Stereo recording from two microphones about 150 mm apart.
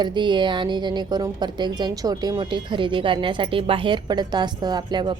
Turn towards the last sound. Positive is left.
turn(degrees=-30)  # may be behind; listen again after turning